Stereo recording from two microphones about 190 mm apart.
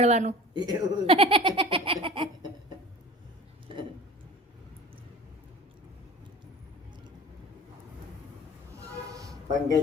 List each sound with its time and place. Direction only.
0.0 s speech: 35° right (ahead or behind)
0.5 s a woman's voice: 20° right (ahead or behind)
9.1 s a sound: 20° right (ahead or behind)